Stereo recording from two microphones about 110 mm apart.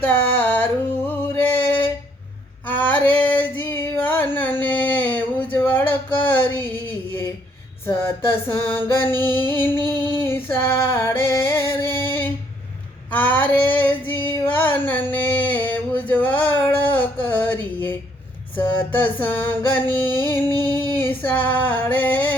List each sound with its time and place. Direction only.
0.0 s a sound: 15° left (ahead or behind)
2.6 s female singing: 15° left (ahead or behind)
4.6 s a sound: 15° left (ahead or behind)
7.9 s music: 20° left (ahead or behind)
10.2 s female singing: 20° left (ahead or behind)
11.7 s music: 20° left (ahead or behind)
13.1 s female singing: 15° left (ahead or behind)
14.4 s a sound: 15° left (ahead or behind)
18.5 s music: 15° left (ahead or behind)
20.7 s child singing: 20° left (ahead or behind)
21.2 s female singing: 15° left (ahead or behind)